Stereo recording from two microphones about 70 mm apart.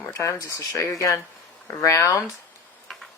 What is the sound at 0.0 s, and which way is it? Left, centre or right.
Speech, left.